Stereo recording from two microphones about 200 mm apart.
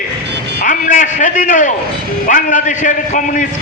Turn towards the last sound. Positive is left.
turn(degrees=40)  # may be behind; listen again after turning